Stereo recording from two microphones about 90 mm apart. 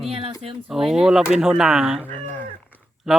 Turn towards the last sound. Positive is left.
turn(degrees=0)  # may be behind; listen again after turning